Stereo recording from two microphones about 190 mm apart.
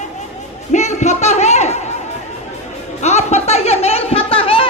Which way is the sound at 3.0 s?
35° left (ahead or behind).